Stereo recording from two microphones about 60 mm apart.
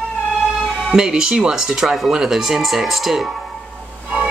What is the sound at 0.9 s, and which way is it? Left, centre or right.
Speech, centre.